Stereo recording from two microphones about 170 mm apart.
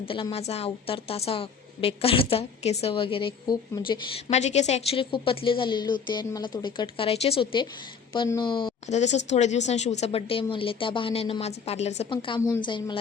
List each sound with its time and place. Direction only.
0.0 s a woman's voice: 30° left (ahead or behind)
4.3 s a woman's voice: 40° left (ahead or behind)
8.9 s a woman's voice: 45° left (ahead or behind)
12.0 s speech: 30° left (ahead or behind)